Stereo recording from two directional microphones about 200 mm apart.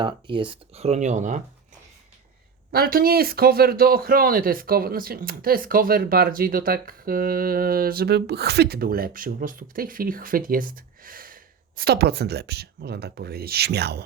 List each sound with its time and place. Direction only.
0.0 s speech: 25° right (ahead or behind)
2.7 s a man's voice: 50° right (ahead or behind)